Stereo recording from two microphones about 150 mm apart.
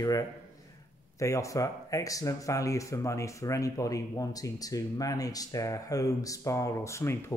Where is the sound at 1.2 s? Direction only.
20° left (ahead or behind).